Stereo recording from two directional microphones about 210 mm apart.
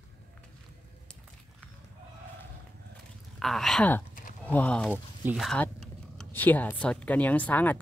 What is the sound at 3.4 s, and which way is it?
Speech, centre (ahead or behind).